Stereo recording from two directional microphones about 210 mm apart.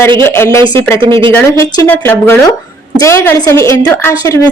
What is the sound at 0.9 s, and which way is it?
Speech, 25° right (ahead or behind).